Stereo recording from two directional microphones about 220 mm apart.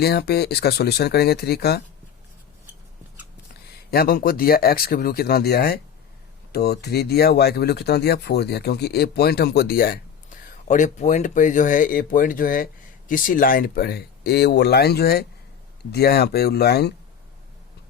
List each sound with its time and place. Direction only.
0.0 s speech: 45° left (ahead or behind)
3.9 s speech: 45° left (ahead or behind)